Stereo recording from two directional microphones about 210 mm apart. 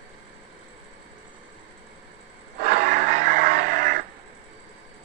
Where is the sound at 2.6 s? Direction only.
35° right (ahead or behind).